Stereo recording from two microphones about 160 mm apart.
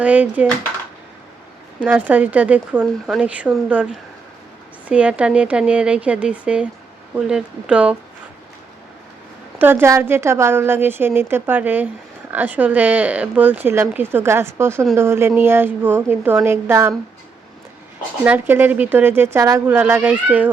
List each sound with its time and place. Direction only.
0.0 s speech: 10° right (ahead or behind)
1.8 s speech: 10° right (ahead or behind)
4.9 s speech: 10° right (ahead or behind)
9.6 s speech: 15° right (ahead or behind)
18.3 s speech: 10° right (ahead or behind)